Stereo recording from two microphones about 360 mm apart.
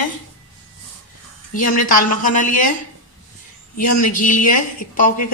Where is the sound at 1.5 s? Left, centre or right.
Left.